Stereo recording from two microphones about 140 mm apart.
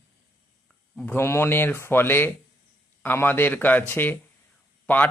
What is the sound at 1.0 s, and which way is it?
Speech, 15° left (ahead or behind).